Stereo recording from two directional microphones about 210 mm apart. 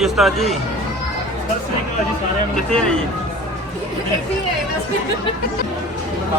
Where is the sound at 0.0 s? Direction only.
Centre (ahead or behind).